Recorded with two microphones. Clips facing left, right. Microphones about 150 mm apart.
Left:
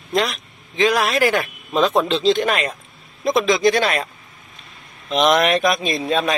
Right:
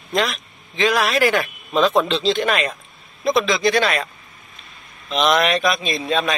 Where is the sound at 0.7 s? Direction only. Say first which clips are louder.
Left 1 dB; 40° left (ahead or behind).